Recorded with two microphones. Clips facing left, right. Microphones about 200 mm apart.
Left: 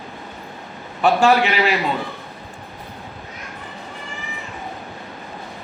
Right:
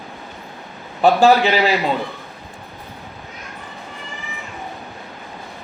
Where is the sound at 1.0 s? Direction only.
35° right (ahead or behind).